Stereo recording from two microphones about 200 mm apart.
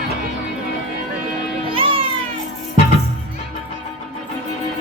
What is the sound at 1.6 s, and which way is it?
Music, 25° right (ahead or behind).